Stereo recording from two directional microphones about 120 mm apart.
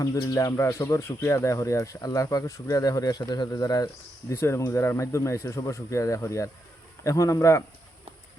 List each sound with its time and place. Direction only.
0.0 s speech: 25° left (ahead or behind)
4.3 s speech: 20° left (ahead or behind)